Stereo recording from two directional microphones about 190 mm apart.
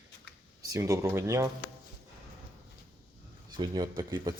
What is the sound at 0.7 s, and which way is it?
Speech, 15° right (ahead or behind).